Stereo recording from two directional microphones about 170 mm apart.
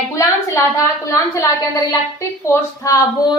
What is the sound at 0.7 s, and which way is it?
A woman's voice, 20° left (ahead or behind).